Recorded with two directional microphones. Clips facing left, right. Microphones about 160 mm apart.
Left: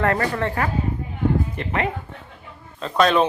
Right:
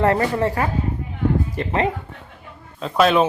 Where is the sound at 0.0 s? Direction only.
20° right (ahead or behind).